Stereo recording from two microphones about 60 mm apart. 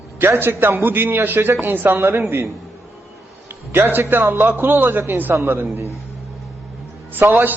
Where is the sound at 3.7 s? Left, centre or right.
Right.